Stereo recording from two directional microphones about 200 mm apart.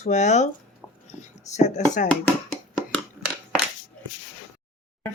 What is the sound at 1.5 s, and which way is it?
Speech, 35° left (ahead or behind).